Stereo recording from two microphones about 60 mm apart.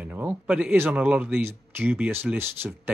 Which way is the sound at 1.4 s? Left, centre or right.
Right.